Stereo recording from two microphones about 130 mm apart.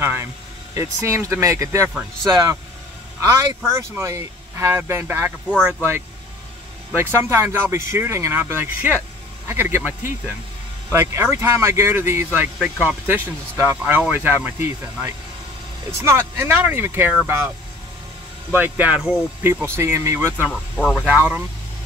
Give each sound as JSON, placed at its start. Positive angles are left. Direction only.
{"t": 0.0, "sound": "speech", "side_deg": -15}
{"t": 7.0, "sound": "speech", "side_deg": -20}
{"t": 12.5, "sound": "speech", "side_deg": -10}
{"t": 18.5, "sound": "speech", "side_deg": -15}
{"t": 19.4, "sound": "speech", "side_deg": -20}
{"t": 20.4, "sound": "speech", "side_deg": 0}
{"t": 21.0, "sound": "speech", "side_deg": -15}